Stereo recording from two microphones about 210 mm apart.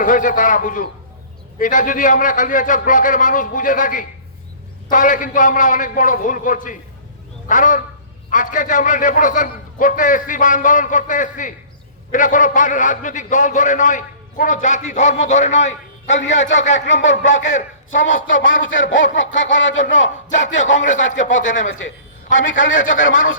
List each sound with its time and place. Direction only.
0.0 s a man's voice: 40° left (ahead or behind)
7.4 s quack: 40° left (ahead or behind)
8.3 s a man's voice: 40° left (ahead or behind)
17.9 s a man's voice: 65° left (ahead or behind)
20.3 s a man's voice: 35° left (ahead or behind)
22.4 s speech: 65° left (ahead or behind)